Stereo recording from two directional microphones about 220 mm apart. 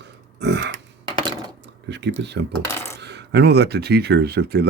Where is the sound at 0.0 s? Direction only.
50° right (ahead or behind).